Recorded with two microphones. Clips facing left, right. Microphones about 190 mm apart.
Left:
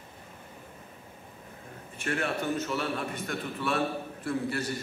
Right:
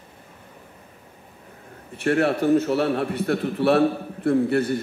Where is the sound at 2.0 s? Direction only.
65° right (ahead or behind).